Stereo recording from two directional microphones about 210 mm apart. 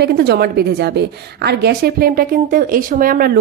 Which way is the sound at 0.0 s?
50° right (ahead or behind).